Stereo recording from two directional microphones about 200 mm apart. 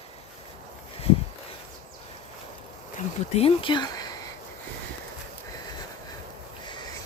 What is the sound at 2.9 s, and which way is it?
Speech, 30° left (ahead or behind).